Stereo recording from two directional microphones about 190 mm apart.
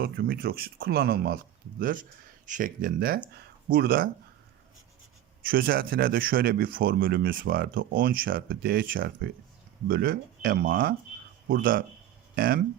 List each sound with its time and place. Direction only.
0.0 s speech: 50° right (ahead or behind)
5.4 s speech: 50° right (ahead or behind)